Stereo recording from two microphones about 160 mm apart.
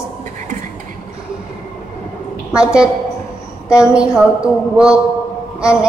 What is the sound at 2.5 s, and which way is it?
A woman's voice, 5° right (ahead or behind).